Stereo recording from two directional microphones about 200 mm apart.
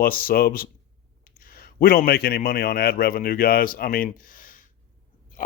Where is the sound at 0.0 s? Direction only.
45° left (ahead or behind).